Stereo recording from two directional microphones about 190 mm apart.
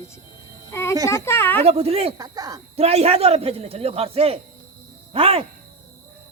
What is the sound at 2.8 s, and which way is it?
Speech, 35° right (ahead or behind).